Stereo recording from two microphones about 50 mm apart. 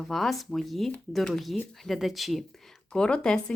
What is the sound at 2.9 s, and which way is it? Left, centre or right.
Speech, centre.